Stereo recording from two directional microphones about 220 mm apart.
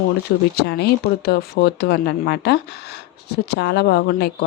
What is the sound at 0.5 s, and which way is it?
Speech, 50° left (ahead or behind).